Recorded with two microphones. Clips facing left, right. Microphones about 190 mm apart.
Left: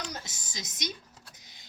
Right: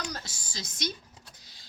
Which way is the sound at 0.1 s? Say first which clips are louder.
Right 1 dB; 20° left (ahead or behind).